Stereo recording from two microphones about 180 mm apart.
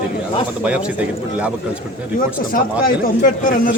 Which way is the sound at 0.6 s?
5° right (ahead or behind).